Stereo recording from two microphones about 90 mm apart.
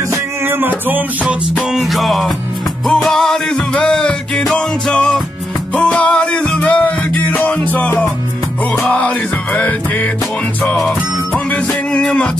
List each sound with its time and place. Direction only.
0.1 s music: 25° right (ahead or behind)
1.7 s music: centre (ahead or behind); by 10.1 s 15° left (ahead or behind)
11.3 s music: 15° left (ahead or behind)